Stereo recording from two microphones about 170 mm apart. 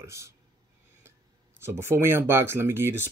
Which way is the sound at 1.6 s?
15° right (ahead or behind).